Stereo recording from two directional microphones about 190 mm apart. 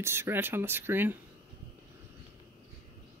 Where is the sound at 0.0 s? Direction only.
15° right (ahead or behind).